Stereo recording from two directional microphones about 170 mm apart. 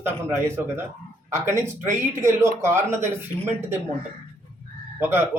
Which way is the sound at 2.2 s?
15° right (ahead or behind).